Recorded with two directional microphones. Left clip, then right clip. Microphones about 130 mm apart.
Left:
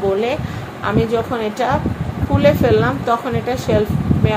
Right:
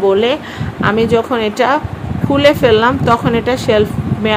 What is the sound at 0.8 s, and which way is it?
Speech, 90° right.